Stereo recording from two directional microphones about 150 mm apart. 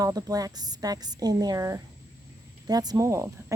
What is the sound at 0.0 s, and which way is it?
A woman's voice, 25° right (ahead or behind).